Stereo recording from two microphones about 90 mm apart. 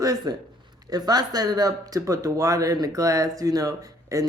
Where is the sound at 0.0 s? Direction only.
40° right (ahead or behind).